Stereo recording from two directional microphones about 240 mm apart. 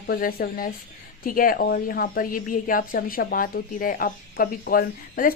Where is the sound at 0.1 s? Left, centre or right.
Left.